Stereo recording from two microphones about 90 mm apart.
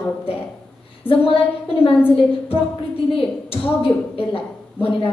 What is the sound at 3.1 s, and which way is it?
A woman's voice, 90° left.